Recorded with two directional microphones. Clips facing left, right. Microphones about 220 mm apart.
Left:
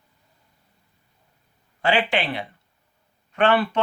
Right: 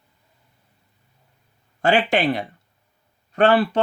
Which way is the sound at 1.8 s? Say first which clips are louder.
Right 3 dB; 45° right (ahead or behind).